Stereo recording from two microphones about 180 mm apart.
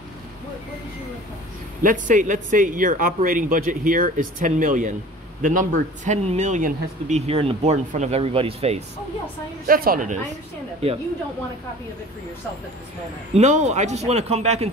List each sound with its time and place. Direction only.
1.8 s a man's voice: 45° right (ahead or behind)
9.7 s a man's voice: 55° right (ahead or behind)
10.8 s a man's voice: 35° right (ahead or behind)
13.3 s a man's voice: 40° right (ahead or behind)